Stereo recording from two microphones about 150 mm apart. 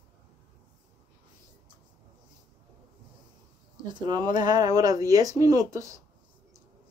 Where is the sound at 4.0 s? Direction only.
25° right (ahead or behind).